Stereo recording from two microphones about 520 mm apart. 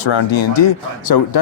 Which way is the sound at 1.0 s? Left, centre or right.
Left.